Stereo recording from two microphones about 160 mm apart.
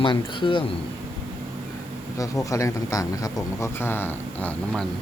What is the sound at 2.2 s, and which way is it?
Speech, 20° left (ahead or behind).